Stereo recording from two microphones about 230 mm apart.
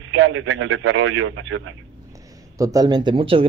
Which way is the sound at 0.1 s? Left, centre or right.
Right.